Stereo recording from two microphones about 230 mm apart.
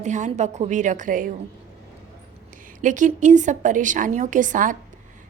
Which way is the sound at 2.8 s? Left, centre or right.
Right.